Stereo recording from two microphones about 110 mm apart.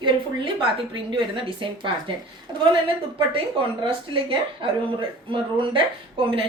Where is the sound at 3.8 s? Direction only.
50° right (ahead or behind).